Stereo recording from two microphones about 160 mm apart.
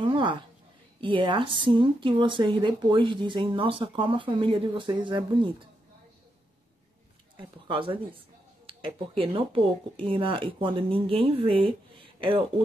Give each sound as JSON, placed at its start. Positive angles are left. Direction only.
{"t": 0.0, "sound": "a sound", "side_deg": -30}
{"t": 1.0, "sound": "speech", "side_deg": -30}
{"t": 7.3, "sound": "speech", "side_deg": -30}